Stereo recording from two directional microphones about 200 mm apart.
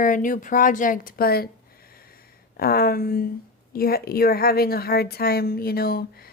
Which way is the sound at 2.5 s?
50° left (ahead or behind).